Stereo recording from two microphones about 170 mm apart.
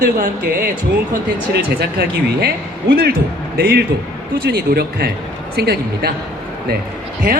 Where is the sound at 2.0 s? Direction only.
65° right (ahead or behind).